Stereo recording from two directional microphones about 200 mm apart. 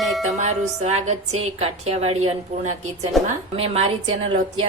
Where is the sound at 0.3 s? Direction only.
35° right (ahead or behind).